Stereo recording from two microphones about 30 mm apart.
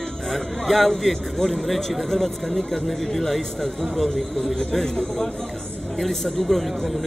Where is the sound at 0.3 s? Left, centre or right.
Centre.